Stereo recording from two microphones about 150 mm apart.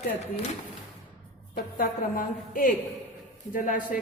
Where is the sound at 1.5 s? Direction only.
80° left.